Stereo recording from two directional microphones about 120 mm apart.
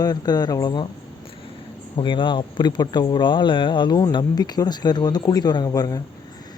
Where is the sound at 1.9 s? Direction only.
45° left (ahead or behind).